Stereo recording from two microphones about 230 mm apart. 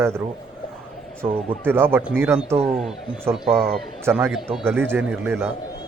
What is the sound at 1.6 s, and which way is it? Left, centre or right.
Speech, centre.